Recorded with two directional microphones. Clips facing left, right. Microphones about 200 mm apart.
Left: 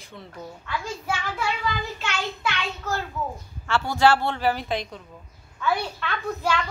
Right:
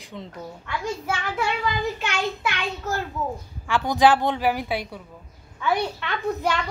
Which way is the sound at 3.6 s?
15° right (ahead or behind).